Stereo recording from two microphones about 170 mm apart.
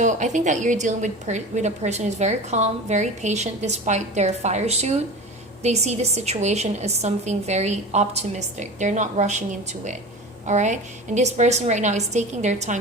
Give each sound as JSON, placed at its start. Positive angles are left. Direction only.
{"t": 0.0, "sound": "a woman's voice", "side_deg": -45}
{"t": 10.4, "sound": "a woman's voice", "side_deg": -45}